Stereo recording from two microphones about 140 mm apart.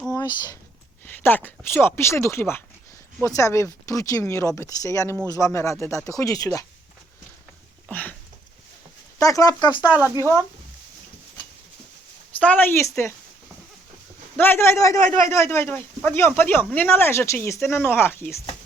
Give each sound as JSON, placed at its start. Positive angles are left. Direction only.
{"t": 0.1, "sound": "a sound", "side_deg": 25}
{"t": 1.0, "sound": "speech", "side_deg": 15}
{"t": 7.9, "sound": "a sound", "side_deg": 10}
{"t": 9.1, "sound": "speech", "side_deg": 25}
{"t": 9.8, "sound": "speech", "side_deg": -10}
{"t": 10.2, "sound": "speech", "side_deg": 15}
{"t": 12.4, "sound": "speech", "side_deg": 10}
{"t": 14.3, "sound": "speech", "side_deg": 15}